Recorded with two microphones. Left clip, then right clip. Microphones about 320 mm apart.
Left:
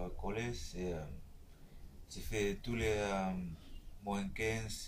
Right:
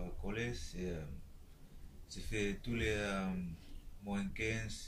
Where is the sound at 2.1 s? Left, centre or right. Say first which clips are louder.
Left 2 dB; centre.